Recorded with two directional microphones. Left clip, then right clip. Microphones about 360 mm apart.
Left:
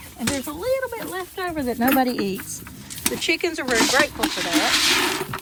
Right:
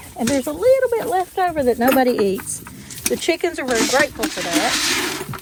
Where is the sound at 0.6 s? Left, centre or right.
Centre.